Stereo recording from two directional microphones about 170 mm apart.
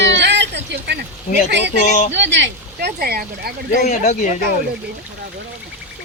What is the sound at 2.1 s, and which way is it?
Speech, 90° right.